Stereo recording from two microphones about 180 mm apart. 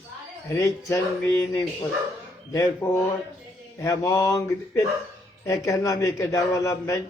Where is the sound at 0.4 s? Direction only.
15° left (ahead or behind).